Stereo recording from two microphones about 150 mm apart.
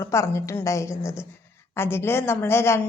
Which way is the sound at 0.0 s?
20° left (ahead or behind).